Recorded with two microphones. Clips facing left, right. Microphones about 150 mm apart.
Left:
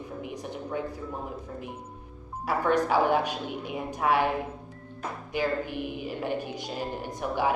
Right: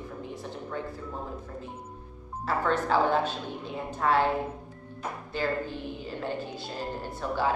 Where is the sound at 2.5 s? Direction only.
15° left (ahead or behind).